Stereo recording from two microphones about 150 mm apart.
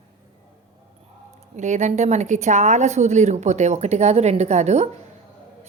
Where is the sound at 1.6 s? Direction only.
50° right (ahead or behind).